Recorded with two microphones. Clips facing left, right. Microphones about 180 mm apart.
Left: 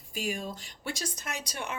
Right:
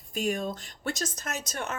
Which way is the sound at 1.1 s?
45° right (ahead or behind).